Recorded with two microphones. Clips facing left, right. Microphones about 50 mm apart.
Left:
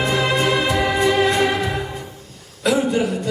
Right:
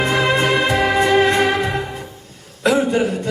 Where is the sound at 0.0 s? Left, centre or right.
Right.